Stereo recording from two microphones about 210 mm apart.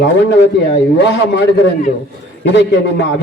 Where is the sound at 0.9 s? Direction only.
55° left (ahead or behind).